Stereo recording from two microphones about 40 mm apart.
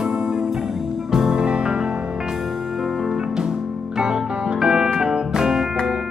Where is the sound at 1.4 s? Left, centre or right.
Right.